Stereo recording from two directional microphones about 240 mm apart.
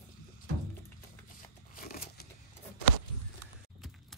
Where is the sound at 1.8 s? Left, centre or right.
Left.